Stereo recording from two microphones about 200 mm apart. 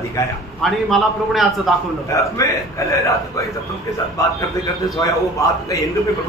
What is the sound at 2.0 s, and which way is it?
Speech, 15° left (ahead or behind).